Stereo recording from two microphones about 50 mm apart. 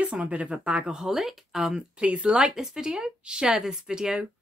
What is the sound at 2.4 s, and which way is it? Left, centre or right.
Speech, centre.